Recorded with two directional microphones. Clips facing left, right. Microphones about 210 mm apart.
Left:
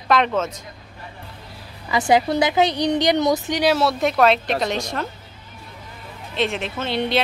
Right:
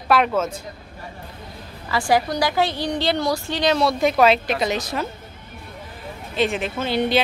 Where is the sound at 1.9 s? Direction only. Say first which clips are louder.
Left 2 dB; 20° left (ahead or behind); by 5.0 s centre (ahead or behind).